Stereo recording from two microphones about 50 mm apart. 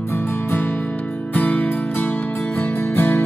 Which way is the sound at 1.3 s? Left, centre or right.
Left.